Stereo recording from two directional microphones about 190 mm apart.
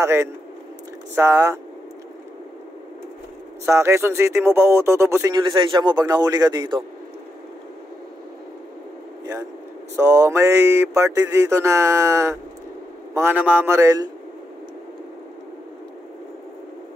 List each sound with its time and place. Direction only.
0.0 s speech: 15° right (ahead or behind)
3.6 s speech: 15° right (ahead or behind)
9.2 s speech: 15° right (ahead or behind)